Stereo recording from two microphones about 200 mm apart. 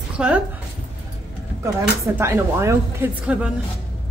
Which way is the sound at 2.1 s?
15° right (ahead or behind).